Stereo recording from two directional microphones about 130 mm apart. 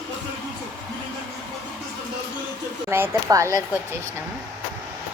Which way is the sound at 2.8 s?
20° right (ahead or behind).